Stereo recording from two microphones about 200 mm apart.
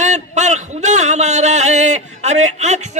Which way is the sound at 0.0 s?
35° right (ahead or behind).